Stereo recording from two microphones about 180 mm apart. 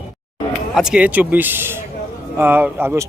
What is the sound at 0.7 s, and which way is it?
A man's voice, 5° right (ahead or behind).